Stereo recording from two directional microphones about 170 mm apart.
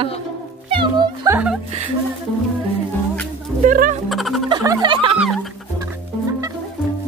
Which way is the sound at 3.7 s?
50° right (ahead or behind).